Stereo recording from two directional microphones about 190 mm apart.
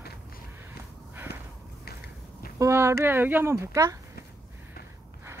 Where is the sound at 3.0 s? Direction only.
10° right (ahead or behind).